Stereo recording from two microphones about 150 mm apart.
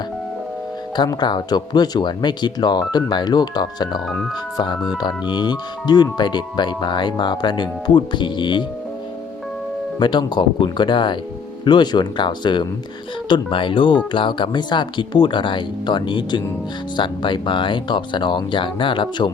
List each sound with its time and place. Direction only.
0.9 s speech: 30° left (ahead or behind)
10.0 s speech: 30° left (ahead or behind)